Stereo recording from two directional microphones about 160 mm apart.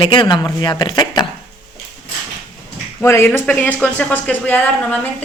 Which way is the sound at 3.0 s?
15° left (ahead or behind).